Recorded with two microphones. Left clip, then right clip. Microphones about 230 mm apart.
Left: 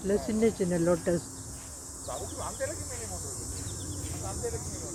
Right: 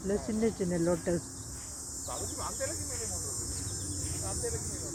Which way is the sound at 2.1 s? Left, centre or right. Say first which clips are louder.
Left 2 dB; right.